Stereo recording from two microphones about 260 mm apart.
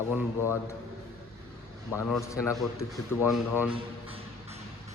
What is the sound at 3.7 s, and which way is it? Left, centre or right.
Music, right.